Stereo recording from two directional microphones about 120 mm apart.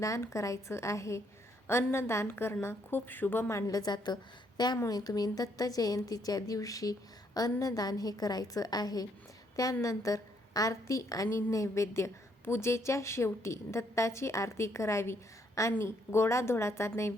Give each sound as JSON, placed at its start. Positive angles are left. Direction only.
{"t": 0.0, "sound": "a woman's voice", "side_deg": 25}
{"t": 3.7, "sound": "a woman's voice", "side_deg": 30}